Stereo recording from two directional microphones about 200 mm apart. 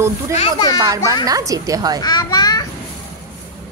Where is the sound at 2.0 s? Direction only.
20° left (ahead or behind).